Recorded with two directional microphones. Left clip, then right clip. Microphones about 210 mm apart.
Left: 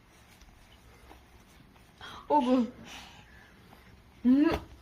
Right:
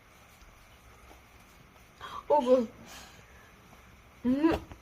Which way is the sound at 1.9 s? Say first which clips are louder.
Even; 15° right (ahead or behind).